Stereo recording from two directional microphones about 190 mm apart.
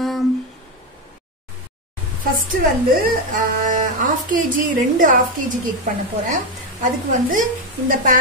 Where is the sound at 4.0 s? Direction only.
45° right (ahead or behind).